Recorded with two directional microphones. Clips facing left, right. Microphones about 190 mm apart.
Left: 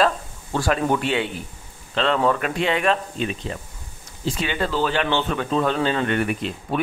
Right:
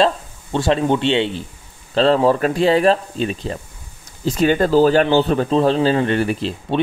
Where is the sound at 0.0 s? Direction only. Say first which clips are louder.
Right 3 dB; 25° right (ahead or behind).